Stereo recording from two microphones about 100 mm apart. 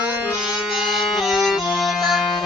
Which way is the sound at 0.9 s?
Centre (ahead or behind).